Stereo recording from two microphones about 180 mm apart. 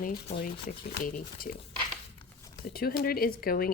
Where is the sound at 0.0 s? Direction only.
55° left (ahead or behind).